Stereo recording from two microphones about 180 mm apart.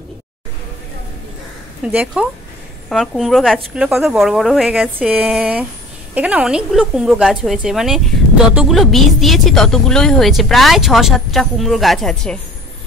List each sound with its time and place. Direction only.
1.9 s speech: 10° right (ahead or behind)